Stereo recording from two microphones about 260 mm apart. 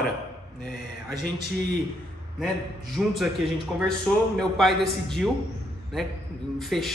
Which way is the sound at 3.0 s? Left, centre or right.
Centre.